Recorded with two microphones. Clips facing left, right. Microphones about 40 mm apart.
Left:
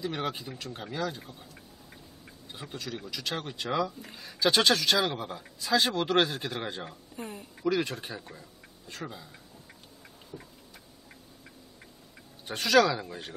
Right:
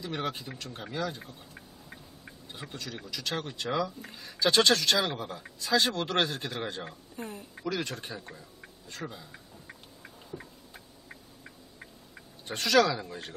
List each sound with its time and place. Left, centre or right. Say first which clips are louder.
0.0 s speech: left 1 dB; centre
2.5 s speech: left 2 dB; centre
10.3 s tick: right 2 dB; centre
12.4 s speech: left 1 dB; centre